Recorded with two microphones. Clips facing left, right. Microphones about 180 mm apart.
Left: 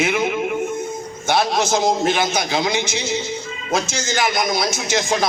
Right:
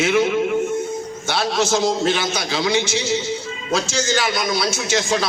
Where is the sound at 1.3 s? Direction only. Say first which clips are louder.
Left 2 dB; 15° left (ahead or behind).